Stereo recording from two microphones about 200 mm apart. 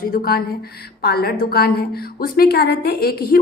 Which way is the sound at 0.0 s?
45° left (ahead or behind).